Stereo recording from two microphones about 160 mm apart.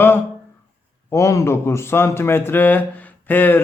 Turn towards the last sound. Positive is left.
turn(degrees=10)  # may be behind; listen again after turning